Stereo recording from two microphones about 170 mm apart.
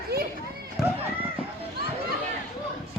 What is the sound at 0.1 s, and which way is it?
Children playing, 70° right (ahead or behind).